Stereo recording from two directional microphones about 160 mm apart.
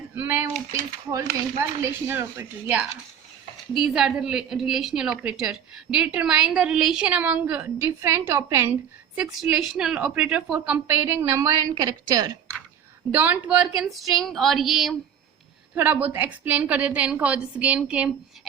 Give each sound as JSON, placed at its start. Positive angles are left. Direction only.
{"t": 0.2, "sound": "cutlery", "side_deg": -15}
{"t": 1.5, "sound": "a woman's voice", "side_deg": -15}
{"t": 3.9, "sound": "a woman's voice", "side_deg": -5}
{"t": 9.1, "sound": "a woman's voice", "side_deg": -5}
{"t": 13.1, "sound": "a woman's voice", "side_deg": -10}
{"t": 15.7, "sound": "a woman's voice", "side_deg": -10}